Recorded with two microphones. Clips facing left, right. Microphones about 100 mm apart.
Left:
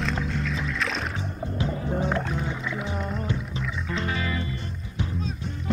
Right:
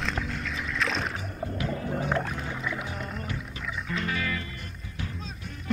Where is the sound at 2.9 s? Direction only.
5° left (ahead or behind).